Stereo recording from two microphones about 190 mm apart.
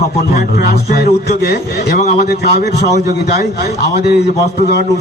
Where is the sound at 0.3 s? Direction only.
55° left (ahead or behind).